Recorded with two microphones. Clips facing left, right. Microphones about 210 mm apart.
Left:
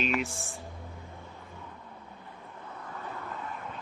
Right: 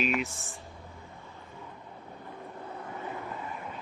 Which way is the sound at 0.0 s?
5° right (ahead or behind).